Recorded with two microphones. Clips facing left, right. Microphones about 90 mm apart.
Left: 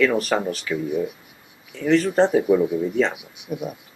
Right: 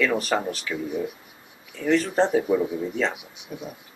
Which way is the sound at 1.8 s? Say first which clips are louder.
Left 3 dB; centre (ahead or behind).